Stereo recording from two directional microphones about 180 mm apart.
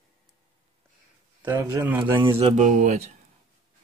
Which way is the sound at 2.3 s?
35° right (ahead or behind).